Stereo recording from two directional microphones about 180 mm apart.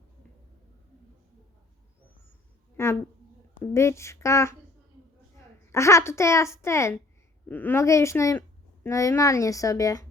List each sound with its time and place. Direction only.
2.7 s speech: 15° left (ahead or behind)
5.7 s speech: 15° left (ahead or behind)